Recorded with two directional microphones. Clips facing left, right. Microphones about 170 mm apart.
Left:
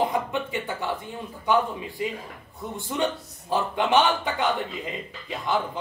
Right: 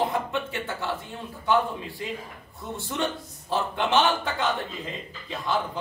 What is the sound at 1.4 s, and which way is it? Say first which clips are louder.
A man's voice: left 1 dB; 15° left (ahead or behind).